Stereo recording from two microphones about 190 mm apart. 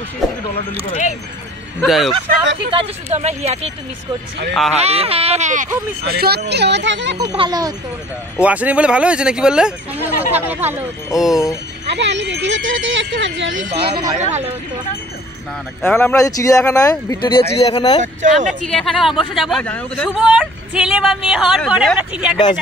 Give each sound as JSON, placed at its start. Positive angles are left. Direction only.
{"t": 1.8, "sound": "speech", "side_deg": 0}
{"t": 2.7, "sound": "speech", "side_deg": -30}
{"t": 4.7, "sound": "speech", "side_deg": -30}
{"t": 6.5, "sound": "speech", "side_deg": -65}
{"t": 7.2, "sound": "speech", "side_deg": -20}
{"t": 8.4, "sound": "speech", "side_deg": -5}
{"t": 11.8, "sound": "speech", "side_deg": -65}
{"t": 13.7, "sound": "speech", "side_deg": -30}
{"t": 15.8, "sound": "speech", "side_deg": 10}
{"t": 18.0, "sound": "speech", "side_deg": -40}
{"t": 18.7, "sound": "speech", "side_deg": 0}